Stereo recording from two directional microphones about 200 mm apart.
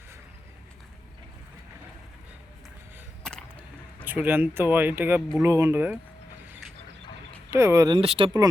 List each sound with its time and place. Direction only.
4.0 s speech: 10° right (ahead or behind)
7.5 s speech: 15° right (ahead or behind)